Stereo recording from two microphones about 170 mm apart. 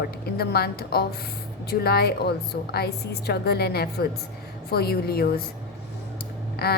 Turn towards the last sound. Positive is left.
turn(degrees=65)  # may be behind; listen again after turning